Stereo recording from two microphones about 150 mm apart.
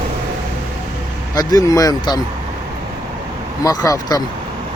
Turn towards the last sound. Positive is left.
turn(degrees=25)  # may be behind; listen again after turning